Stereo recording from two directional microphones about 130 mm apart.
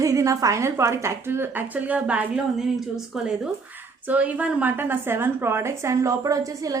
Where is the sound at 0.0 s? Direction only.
25° right (ahead or behind).